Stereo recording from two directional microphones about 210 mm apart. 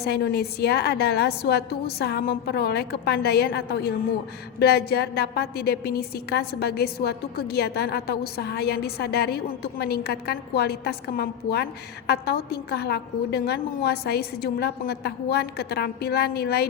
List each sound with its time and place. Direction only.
0.0 s a woman's voice: 50° left (ahead or behind)